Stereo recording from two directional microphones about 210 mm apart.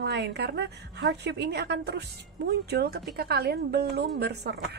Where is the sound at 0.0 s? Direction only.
50° right (ahead or behind).